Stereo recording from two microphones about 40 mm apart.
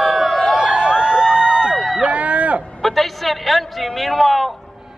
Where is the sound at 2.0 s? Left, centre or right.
Right.